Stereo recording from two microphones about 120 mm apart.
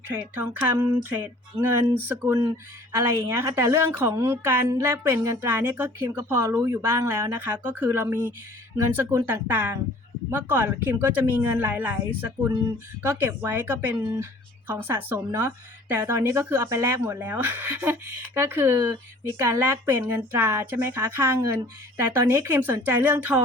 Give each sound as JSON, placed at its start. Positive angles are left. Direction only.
{"t": 0.3, "sound": "a woman's voice", "side_deg": -20}